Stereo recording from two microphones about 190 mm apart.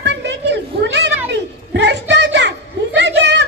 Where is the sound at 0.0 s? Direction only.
65° right (ahead or behind).